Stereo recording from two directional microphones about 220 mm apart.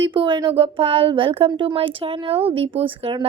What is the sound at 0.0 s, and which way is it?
Speech, 25° right (ahead or behind).